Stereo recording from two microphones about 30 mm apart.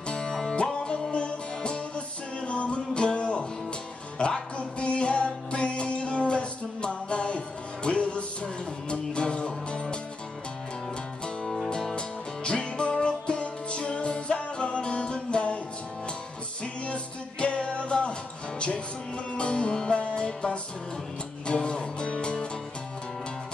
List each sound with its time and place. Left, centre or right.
0.3 s music: centre
0.7 s music: left
11.4 s music: centre
11.7 s music: left
16.6 s music: left
19.3 s music: left
19.9 s music: left